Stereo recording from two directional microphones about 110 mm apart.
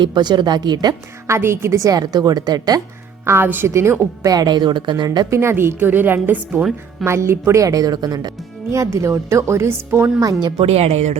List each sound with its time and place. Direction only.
0.0 s a woman's voice: 40° right (ahead or behind)
1.3 s a woman's voice: 25° right (ahead or behind)
3.2 s a woman's voice: 20° right (ahead or behind); by 5.2 s 40° right (ahead or behind)
5.3 s a woman's voice: 25° right (ahead or behind); by 8.3 s 40° right (ahead or behind)
8.7 s speech: 30° right (ahead or behind)
10.6 s speech: 70° right (ahead or behind); by 11.2 s 90° right